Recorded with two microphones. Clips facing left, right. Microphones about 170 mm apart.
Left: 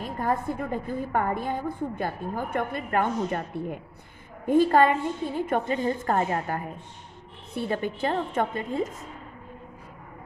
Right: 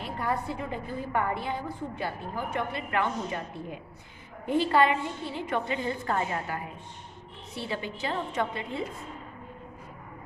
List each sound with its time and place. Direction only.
0.0 s a woman's voice: 45° left (ahead or behind)